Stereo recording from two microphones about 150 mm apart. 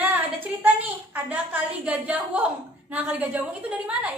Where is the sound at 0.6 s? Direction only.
10° right (ahead or behind).